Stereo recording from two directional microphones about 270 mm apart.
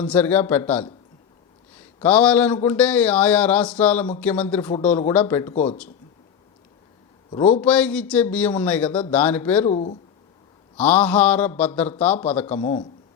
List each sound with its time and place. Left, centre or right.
0.0 s a man's voice: centre
7.3 s a man's voice: left
7.6 s a man's voice: centre
9.6 s speech: left
10.8 s a man's voice: centre
12.5 s speech: centre